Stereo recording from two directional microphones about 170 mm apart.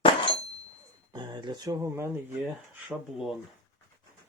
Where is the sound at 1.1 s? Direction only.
25° right (ahead or behind).